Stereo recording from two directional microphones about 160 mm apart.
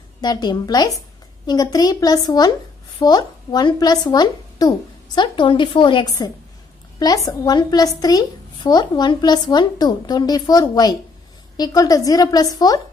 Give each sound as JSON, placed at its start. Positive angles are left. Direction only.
{"t": 0.2, "sound": "a woman's voice", "side_deg": 25}